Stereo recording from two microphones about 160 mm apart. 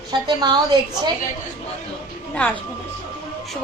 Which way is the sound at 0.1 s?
25° right (ahead or behind).